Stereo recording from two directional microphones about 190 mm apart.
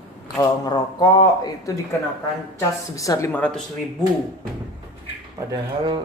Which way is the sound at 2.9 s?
15° left (ahead or behind).